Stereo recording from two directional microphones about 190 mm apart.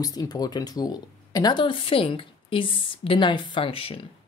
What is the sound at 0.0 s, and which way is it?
Speech, 20° left (ahead or behind).